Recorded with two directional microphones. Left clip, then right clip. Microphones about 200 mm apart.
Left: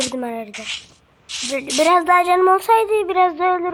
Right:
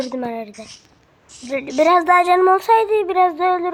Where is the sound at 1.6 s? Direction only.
5° right (ahead or behind).